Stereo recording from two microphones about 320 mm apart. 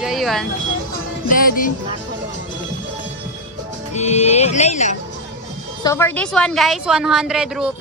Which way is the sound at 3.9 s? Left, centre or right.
Left.